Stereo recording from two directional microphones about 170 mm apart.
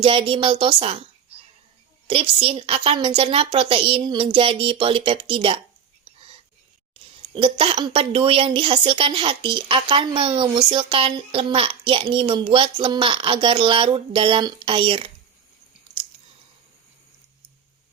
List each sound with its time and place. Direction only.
0.0 s speech: 30° right (ahead or behind)
2.0 s speech: 30° right (ahead or behind)
6.9 s speech: 30° right (ahead or behind)
15.9 s chewing: 5° right (ahead or behind)